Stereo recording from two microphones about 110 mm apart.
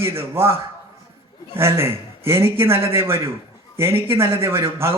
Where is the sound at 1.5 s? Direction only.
25° right (ahead or behind).